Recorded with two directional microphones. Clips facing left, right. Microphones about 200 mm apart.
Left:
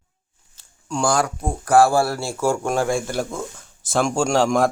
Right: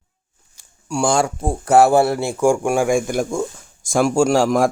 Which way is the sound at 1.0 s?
25° right (ahead or behind).